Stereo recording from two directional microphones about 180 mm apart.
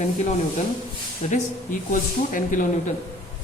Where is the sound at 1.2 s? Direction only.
45° left (ahead or behind).